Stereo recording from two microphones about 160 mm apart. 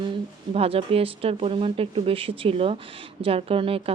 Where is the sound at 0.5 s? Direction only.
40° right (ahead or behind).